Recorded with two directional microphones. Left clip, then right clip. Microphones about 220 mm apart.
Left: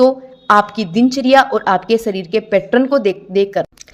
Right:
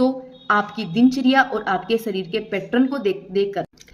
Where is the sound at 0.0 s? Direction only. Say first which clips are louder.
Left 9 dB; 35° left (ahead or behind).